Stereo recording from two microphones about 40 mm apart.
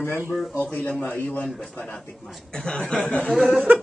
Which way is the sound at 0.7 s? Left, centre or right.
Left.